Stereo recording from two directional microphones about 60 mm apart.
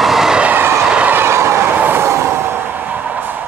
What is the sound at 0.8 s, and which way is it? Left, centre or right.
Train, centre.